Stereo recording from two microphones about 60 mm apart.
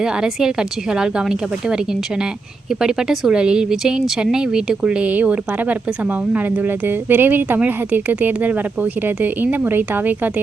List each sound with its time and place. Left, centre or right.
0.0 s speech: centre
2.8 s speech: centre; by 10.4 s right